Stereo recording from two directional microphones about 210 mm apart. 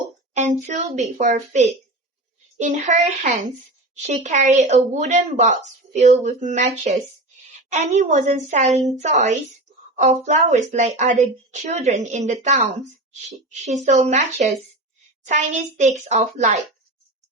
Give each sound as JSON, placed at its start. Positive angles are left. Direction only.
{"t": 0.3, "sound": "a woman's voice", "side_deg": -35}
{"t": 13.7, "sound": "a woman's voice", "side_deg": -30}